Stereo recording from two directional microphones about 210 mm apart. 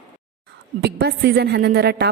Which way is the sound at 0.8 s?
50° right (ahead or behind).